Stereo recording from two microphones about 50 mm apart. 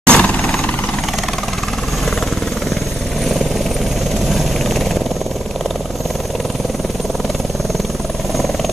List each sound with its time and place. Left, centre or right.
0.0 s vehicle: left
4.3 s vehicle: centre